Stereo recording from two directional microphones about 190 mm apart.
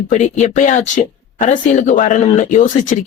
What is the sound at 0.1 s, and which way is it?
Speech, 40° left (ahead or behind).